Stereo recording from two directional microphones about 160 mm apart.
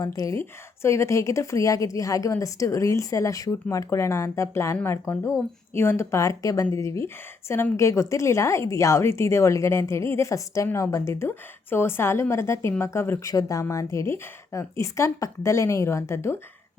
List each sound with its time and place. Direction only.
0.0 s speech: 20° left (ahead or behind)